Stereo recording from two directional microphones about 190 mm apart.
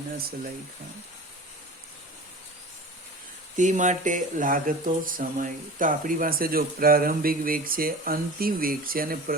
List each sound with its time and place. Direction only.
3.6 s speech: 40° right (ahead or behind)